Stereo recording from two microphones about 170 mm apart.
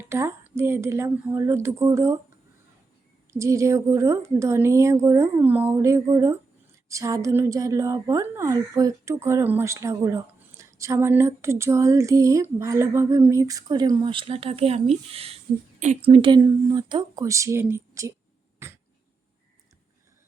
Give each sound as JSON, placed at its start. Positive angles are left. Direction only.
{"t": 0.0, "sound": "a woman's voice", "side_deg": -15}
{"t": 3.3, "sound": "a woman's voice", "side_deg": -15}
{"t": 6.8, "sound": "a sound", "side_deg": -20}
{"t": 18.6, "sound": "cough", "side_deg": -15}